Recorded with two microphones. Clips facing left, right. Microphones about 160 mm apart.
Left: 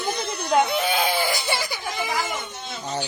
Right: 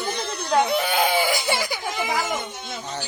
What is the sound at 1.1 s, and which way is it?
Speech, 15° right (ahead or behind).